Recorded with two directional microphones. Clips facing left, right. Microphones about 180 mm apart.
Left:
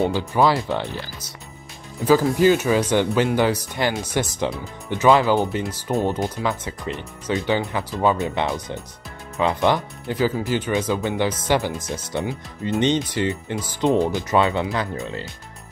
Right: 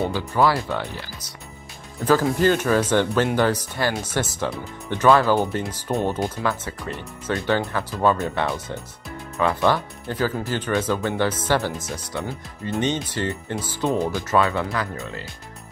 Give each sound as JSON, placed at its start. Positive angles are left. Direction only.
{"t": 0.1, "sound": "speech", "side_deg": 15}
{"t": 2.0, "sound": "speech", "side_deg": 5}